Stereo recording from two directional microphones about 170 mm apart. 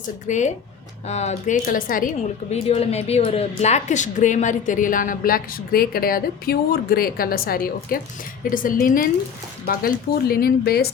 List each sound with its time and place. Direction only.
0.3 s a woman's voice: 45° left (ahead or behind)
2.5 s a woman's voice: 35° left (ahead or behind); by 10.8 s 65° left (ahead or behind)